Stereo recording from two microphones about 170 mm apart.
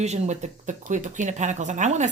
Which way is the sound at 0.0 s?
40° right (ahead or behind).